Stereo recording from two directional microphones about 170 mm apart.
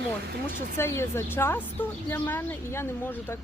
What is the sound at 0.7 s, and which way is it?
A woman's voice, 15° left (ahead or behind).